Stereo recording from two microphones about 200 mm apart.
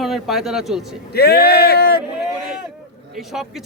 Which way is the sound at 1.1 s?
50° left (ahead or behind).